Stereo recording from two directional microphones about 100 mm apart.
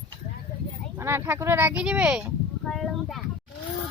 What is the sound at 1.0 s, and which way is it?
Speech, 25° right (ahead or behind).